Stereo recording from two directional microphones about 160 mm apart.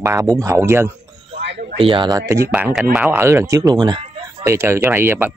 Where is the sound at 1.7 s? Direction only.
30° right (ahead or behind); by 5.3 s 15° right (ahead or behind).